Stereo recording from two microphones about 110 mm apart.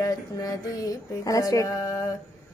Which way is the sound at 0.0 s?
35° left (ahead or behind).